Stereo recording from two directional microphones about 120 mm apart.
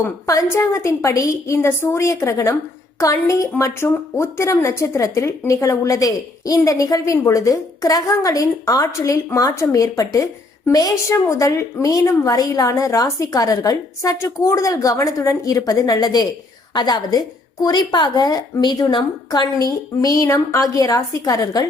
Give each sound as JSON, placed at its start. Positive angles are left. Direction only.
{"t": 0.5, "sound": "a woman's voice", "side_deg": 25}
{"t": 20.0, "sound": "a woman's voice", "side_deg": 30}